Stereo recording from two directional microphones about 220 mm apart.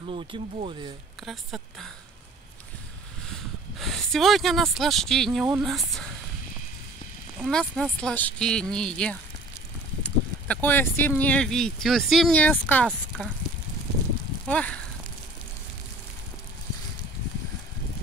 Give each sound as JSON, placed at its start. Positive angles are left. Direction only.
{"t": 0.0, "sound": "speech", "side_deg": -25}
{"t": 1.2, "sound": "speech", "side_deg": 0}
{"t": 3.3, "sound": "speech", "side_deg": 0}
{"t": 7.3, "sound": "speech", "side_deg": 0}
{"t": 14.5, "sound": "speech", "side_deg": 5}